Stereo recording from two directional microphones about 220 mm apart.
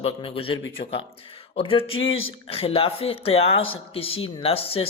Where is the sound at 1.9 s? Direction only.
65° left (ahead or behind).